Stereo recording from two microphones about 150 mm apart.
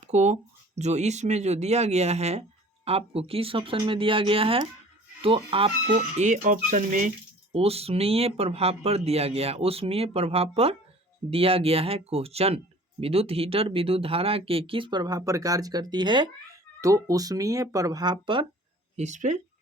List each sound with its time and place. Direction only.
0.0 s speech: 50° right (ahead or behind)
6.1 s speech: 55° right (ahead or behind)
7.5 s speech: 40° right (ahead or behind)
18.9 s speech: 50° right (ahead or behind)